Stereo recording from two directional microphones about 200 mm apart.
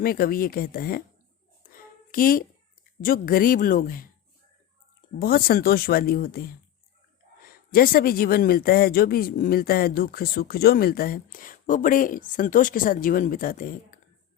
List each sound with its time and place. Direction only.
0.0 s speech: 50° left (ahead or behind)
1.7 s a sound: 45° left (ahead or behind)
3.0 s speech: 45° left (ahead or behind)
5.2 s speech: 50° left (ahead or behind)